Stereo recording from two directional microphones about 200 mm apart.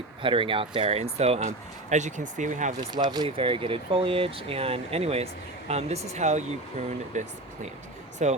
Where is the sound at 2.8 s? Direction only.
20° right (ahead or behind).